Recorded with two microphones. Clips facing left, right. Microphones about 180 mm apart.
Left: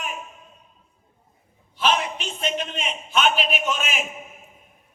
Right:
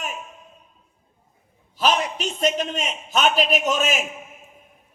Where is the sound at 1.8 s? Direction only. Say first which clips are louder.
Right 2 dB; 40° right (ahead or behind).